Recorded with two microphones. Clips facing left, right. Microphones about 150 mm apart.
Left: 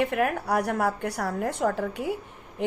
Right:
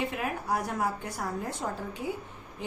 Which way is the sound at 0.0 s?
65° left (ahead or behind).